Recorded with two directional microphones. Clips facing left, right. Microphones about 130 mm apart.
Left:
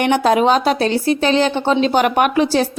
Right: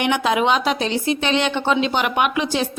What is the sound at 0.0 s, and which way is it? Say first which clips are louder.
A woman's voice: left 5 dB; 40° left (ahead or behind).